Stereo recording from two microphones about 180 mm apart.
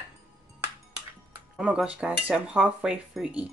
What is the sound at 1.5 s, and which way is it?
Speech, 5° right (ahead or behind).